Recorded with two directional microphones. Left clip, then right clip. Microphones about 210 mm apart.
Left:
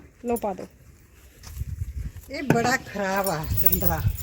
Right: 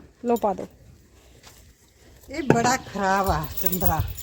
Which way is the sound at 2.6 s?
40° right (ahead or behind).